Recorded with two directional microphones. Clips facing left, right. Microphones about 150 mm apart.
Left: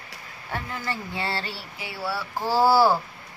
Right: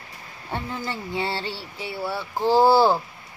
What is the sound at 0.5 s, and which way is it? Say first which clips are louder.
Speech: right 1 dB; 20° right (ahead or behind).